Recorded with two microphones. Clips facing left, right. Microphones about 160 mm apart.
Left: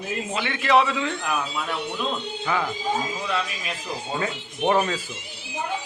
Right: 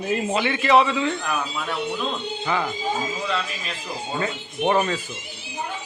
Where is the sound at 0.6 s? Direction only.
Centre (ahead or behind).